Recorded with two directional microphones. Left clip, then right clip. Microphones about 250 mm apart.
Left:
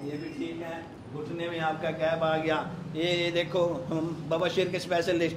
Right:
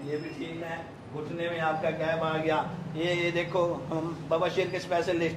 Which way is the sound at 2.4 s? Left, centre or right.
Left.